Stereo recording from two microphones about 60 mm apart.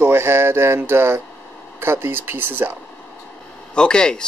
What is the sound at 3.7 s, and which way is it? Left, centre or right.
Speech, centre.